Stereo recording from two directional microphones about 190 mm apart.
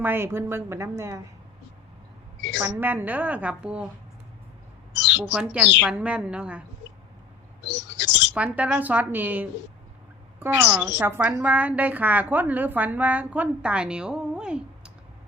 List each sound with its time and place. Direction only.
0.0 s a woman's voice: 10° right (ahead or behind)
2.4 s a sound: 70° left (ahead or behind)
2.8 s a woman's voice: 10° right (ahead or behind)
4.9 s squawk: 70° left (ahead or behind)
5.3 s a woman's voice: 5° right (ahead or behind)
7.7 s a sound: 70° left (ahead or behind)
8.3 s a woman's voice: 10° right (ahead or behind)
11.0 s a woman's voice: 10° right (ahead or behind)